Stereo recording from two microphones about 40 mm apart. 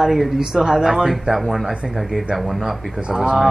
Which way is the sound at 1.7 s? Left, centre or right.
Right.